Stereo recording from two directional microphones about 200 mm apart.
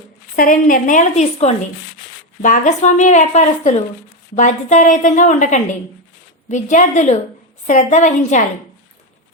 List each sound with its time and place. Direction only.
0.3 s speech: 45° left (ahead or behind)